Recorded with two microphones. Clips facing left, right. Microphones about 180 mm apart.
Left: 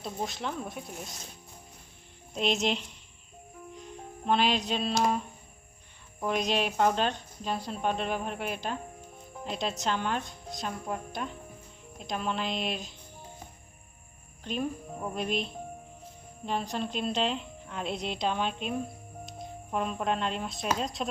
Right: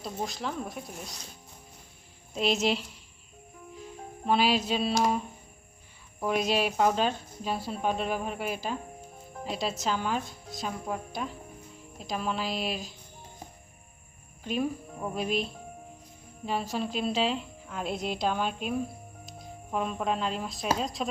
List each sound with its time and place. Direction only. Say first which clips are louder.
0.0 s speech: even; centre (ahead or behind)
2.3 s speech: right 2 dB; centre (ahead or behind)
3.8 s music: right 3 dB; 5° right (ahead or behind)
6.1 s speech: right 2 dB; 5° right (ahead or behind)
14.4 s speech: right 2 dB; 5° right (ahead or behind)
16.5 s speech: right 1 dB; 5° right (ahead or behind)